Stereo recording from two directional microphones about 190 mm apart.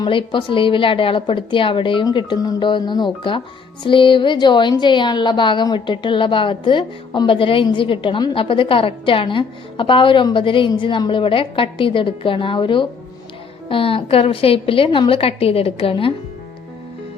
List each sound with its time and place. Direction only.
0.0 s a woman's voice: 25° left (ahead or behind)